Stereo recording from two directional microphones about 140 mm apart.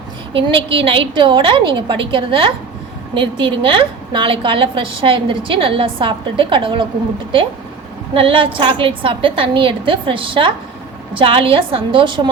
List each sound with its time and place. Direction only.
0.3 s a woman's voice: 40° right (ahead or behind)
8.1 s a woman's voice: 35° right (ahead or behind)